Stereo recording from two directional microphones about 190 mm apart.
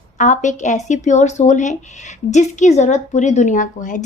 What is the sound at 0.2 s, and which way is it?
A woman's voice, 40° left (ahead or behind).